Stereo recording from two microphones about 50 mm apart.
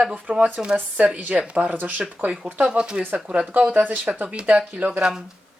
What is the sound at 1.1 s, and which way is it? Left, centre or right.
Speech, right.